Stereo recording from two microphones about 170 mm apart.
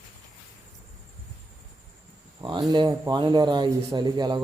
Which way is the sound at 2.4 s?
25° right (ahead or behind).